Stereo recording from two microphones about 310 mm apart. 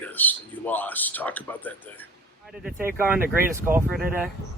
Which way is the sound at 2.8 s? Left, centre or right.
Centre.